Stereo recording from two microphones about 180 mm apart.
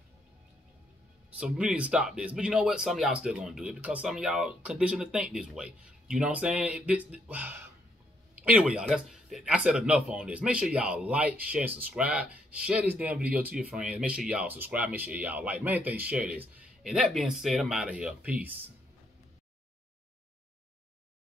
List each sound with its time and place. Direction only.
1.4 s speech: 5° right (ahead or behind)